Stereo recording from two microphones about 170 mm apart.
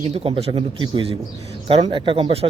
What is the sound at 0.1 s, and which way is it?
Speech, 35° right (ahead or behind).